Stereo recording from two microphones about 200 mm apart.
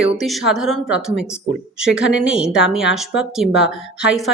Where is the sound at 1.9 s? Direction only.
70° left (ahead or behind).